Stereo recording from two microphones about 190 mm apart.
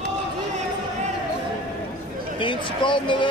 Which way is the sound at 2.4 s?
25° left (ahead or behind).